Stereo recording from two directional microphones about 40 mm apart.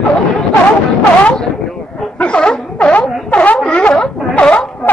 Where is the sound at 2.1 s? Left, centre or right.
Left.